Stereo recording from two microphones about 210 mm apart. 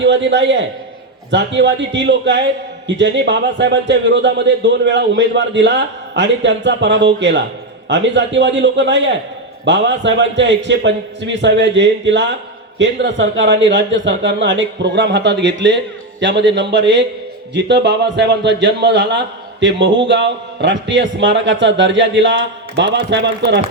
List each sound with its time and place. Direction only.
0.0 s a man's voice: 60° right (ahead or behind)